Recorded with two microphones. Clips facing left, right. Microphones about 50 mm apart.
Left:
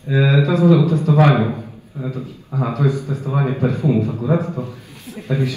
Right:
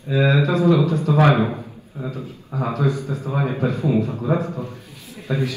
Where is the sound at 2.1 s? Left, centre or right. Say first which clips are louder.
Left 3 dB; left.